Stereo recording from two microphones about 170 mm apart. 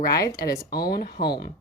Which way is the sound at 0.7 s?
65° left (ahead or behind).